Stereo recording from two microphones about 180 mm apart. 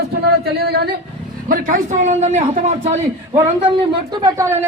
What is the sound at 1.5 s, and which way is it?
A woman's voice, 45° right (ahead or behind).